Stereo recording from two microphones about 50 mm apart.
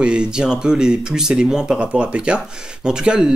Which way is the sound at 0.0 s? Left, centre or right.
Centre.